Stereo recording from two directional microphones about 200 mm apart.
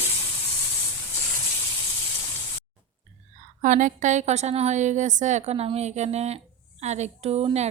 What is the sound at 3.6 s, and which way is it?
A woman's voice, 40° right (ahead or behind).